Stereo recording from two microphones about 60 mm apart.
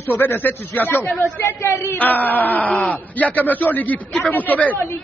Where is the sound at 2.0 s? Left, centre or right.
Left.